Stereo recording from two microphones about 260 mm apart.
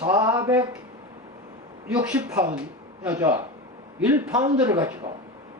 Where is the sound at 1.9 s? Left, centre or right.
Centre.